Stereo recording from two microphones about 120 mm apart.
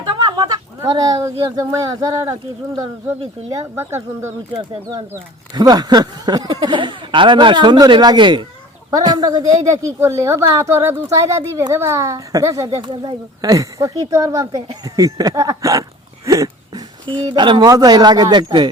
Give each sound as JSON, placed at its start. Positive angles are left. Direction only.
{"t": 0.1, "sound": "chicken", "side_deg": -35}
{"t": 1.5, "sound": "speech", "side_deg": -30}
{"t": 3.5, "sound": "speech", "side_deg": -20}
{"t": 4.9, "sound": "speech", "side_deg": -35}
{"t": 12.8, "sound": "speech", "side_deg": -40}
{"t": 16.2, "sound": "a sound", "side_deg": -30}
{"t": 17.2, "sound": "speech", "side_deg": -40}